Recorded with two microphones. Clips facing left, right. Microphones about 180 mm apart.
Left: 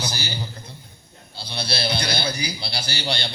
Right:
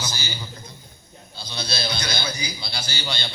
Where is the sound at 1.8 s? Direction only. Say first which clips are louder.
Left 5 dB; 60° left (ahead or behind).